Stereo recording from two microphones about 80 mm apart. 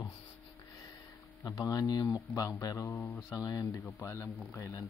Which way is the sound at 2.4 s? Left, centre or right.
Left.